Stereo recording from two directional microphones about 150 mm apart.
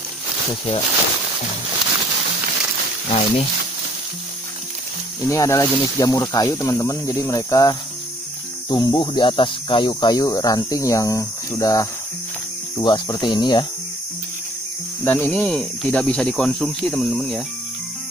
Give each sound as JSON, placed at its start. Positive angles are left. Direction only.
{"t": 3.1, "sound": "speech", "side_deg": 40}
{"t": 5.2, "sound": "speech", "side_deg": 20}
{"t": 15.0, "sound": "speech", "side_deg": 10}